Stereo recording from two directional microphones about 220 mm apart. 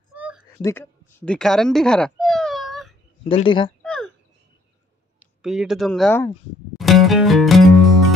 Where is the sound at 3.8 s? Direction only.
5° left (ahead or behind).